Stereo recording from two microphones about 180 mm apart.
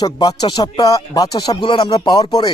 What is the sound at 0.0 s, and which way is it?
Speech, 20° left (ahead or behind).